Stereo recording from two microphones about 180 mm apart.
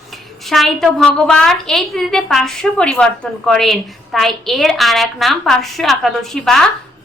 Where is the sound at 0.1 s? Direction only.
Centre (ahead or behind).